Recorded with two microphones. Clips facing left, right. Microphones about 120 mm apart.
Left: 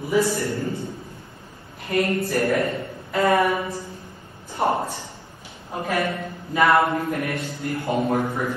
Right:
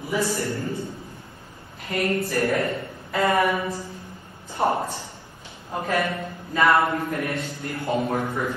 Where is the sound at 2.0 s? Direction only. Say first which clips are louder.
Left 2 dB; 25° left (ahead or behind).